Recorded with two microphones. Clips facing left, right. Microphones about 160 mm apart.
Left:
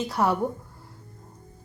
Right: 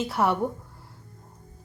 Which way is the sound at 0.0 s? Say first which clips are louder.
Even; centre (ahead or behind).